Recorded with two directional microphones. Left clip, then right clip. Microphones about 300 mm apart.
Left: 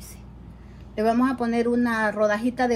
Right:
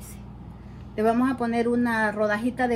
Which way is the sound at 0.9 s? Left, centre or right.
Centre.